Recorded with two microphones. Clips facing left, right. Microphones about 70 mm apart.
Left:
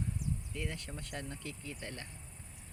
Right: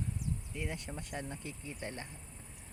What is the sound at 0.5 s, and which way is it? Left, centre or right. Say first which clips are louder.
Speech: right 1 dB; centre.